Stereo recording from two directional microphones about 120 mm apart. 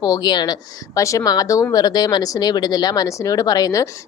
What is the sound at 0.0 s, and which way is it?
A woman's voice, 35° left (ahead or behind).